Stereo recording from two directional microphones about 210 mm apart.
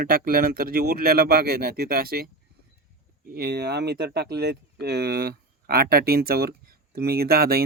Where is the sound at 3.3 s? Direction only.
50° right (ahead or behind).